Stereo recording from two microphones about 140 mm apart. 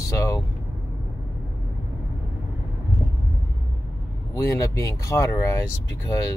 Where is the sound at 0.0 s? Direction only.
25° left (ahead or behind).